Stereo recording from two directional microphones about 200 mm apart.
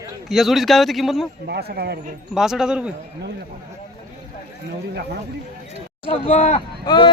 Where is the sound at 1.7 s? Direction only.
55° right (ahead or behind).